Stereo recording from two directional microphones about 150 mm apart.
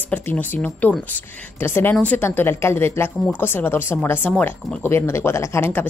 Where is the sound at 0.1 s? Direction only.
10° left (ahead or behind).